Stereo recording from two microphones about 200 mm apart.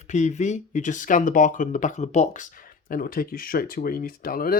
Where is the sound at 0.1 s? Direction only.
35° left (ahead or behind).